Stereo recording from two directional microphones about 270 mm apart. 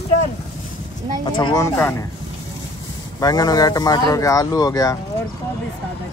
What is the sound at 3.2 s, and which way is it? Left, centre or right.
Speech, centre.